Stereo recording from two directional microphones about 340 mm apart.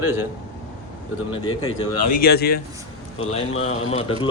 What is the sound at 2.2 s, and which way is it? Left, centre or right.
Speech, left.